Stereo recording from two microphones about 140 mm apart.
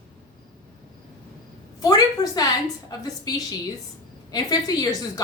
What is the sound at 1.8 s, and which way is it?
A woman's voice, 25° left (ahead or behind).